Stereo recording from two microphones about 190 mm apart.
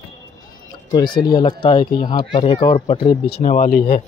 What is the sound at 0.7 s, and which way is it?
Speech, 20° left (ahead or behind).